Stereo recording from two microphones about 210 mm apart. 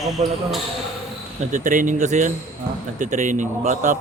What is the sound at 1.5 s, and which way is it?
A man's voice, 40° right (ahead or behind).